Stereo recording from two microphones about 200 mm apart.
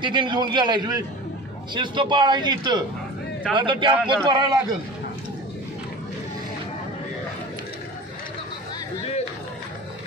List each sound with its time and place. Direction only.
0.0 s speech: 25° right (ahead or behind)
3.9 s a man's voice: 5° right (ahead or behind)
4.3 s speech: 20° right (ahead or behind)